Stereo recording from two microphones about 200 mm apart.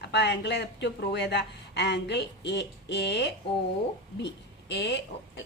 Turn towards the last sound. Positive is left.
turn(degrees=60)  # may be behind; listen again after turning